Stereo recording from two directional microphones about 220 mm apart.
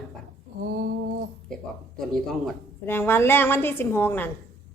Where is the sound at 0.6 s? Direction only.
45° right (ahead or behind).